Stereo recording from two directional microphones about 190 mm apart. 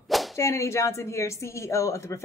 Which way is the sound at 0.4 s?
15° left (ahead or behind).